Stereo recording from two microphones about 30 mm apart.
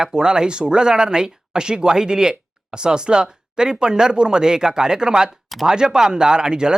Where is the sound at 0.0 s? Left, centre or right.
Right.